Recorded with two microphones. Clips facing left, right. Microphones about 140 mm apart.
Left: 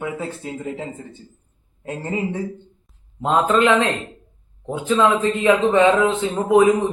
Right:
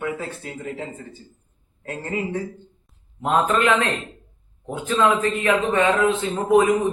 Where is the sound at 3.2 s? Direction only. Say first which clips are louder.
Left 3 dB; 20° left (ahead or behind).